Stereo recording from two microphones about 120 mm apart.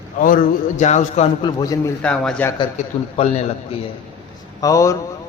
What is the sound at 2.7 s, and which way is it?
A man's voice, 55° left (ahead or behind).